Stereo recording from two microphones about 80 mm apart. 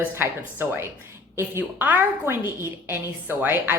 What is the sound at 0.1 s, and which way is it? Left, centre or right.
A woman's voice, right.